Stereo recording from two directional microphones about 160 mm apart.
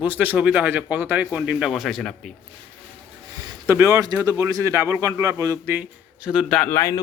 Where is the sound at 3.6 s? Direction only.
15° right (ahead or behind).